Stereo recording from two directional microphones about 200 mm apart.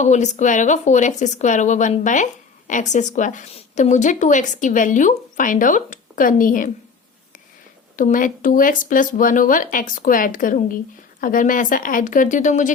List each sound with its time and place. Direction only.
0.0 s speech: 35° left (ahead or behind)
7.9 s speech: 40° left (ahead or behind)